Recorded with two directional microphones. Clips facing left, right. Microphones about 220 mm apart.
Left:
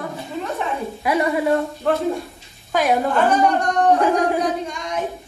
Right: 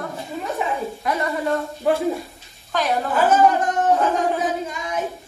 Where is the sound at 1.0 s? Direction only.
10° left (ahead or behind).